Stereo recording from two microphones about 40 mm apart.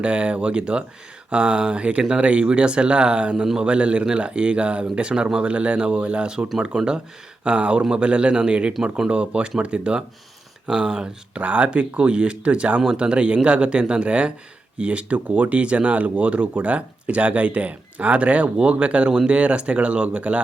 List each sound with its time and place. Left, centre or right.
0.0 s speech: right
6.6 s speech: right
7.4 s speech: right
11.4 s speech: right